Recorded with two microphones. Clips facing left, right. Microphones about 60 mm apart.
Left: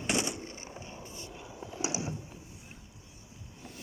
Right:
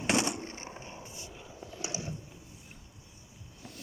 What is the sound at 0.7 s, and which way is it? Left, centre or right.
Skateboard, right.